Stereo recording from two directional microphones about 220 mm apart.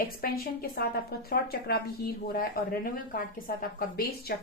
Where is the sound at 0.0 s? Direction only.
45° left (ahead or behind).